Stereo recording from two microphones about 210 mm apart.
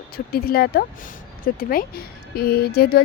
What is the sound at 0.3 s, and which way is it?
A woman's voice, 45° left (ahead or behind).